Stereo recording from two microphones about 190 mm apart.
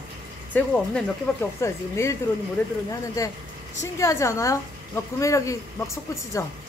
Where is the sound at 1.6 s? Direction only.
15° left (ahead or behind).